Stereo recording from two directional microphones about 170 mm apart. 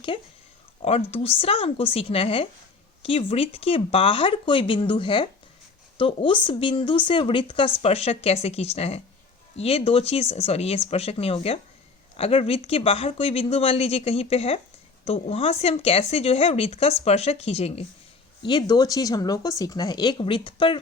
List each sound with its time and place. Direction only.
0.1 s speech: 40° left (ahead or behind)
18.4 s speech: 25° left (ahead or behind)